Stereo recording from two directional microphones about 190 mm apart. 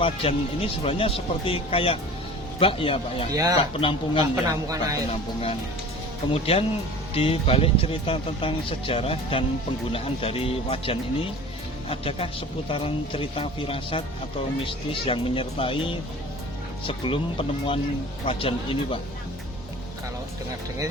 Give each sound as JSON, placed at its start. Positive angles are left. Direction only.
{"t": 0.0, "sound": "speech", "side_deg": 30}
{"t": 3.3, "sound": "speech", "side_deg": -15}
{"t": 3.6, "sound": "speech", "side_deg": 30}
{"t": 4.4, "sound": "speech", "side_deg": -15}
{"t": 6.3, "sound": "speech", "side_deg": 30}